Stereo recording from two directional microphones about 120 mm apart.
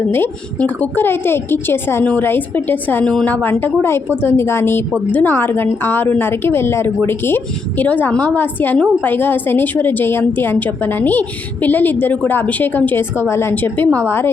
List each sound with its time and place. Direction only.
0.1 s a woman's voice: 15° left (ahead or behind)